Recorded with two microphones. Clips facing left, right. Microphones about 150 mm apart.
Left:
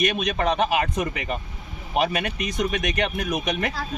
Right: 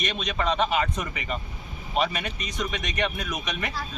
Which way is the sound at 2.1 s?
60° left (ahead or behind).